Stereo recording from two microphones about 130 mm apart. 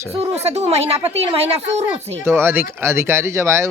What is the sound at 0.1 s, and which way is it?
Speech, 55° right (ahead or behind).